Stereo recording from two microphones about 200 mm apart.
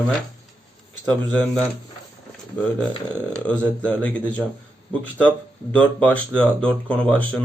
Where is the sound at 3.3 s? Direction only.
5° left (ahead or behind).